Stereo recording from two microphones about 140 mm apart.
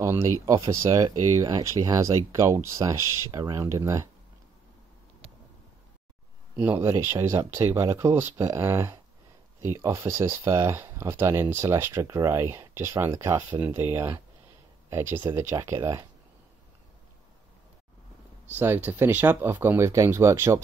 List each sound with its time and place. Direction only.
0.0 s speech: 20° right (ahead or behind)
6.5 s speech: 10° right (ahead or behind)
18.6 s speech: 15° right (ahead or behind)